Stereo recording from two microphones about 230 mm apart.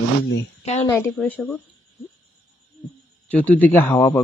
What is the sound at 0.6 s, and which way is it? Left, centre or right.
Speech, left.